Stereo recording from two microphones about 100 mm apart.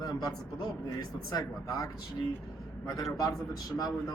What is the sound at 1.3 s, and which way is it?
A man's voice, 35° left (ahead or behind).